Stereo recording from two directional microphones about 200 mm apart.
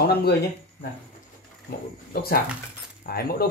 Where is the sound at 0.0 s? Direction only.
50° left (ahead or behind).